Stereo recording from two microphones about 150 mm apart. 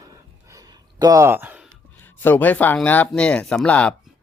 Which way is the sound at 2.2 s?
15° left (ahead or behind).